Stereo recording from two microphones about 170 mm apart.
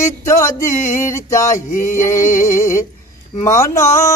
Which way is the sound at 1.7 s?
50° left (ahead or behind).